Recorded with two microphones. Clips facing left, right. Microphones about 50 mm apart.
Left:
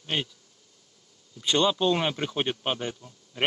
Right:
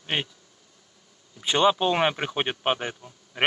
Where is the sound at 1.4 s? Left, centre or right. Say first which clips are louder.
Right 2 dB; centre.